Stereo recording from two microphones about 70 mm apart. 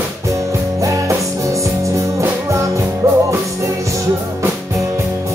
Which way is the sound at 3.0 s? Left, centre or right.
Right.